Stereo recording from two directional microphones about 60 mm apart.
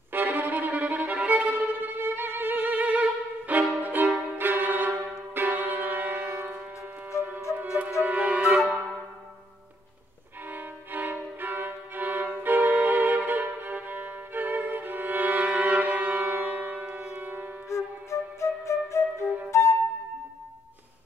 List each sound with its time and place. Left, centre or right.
0.1 s violin: right
4.4 s music: right
7.1 s music: left
7.5 s music: right
10.5 s violin: right
17.2 s music: right
17.6 s flute: left